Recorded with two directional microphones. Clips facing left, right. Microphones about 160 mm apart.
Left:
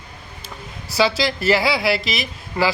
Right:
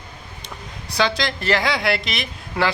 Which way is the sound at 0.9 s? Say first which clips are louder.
Left 3 dB; 5° left (ahead or behind).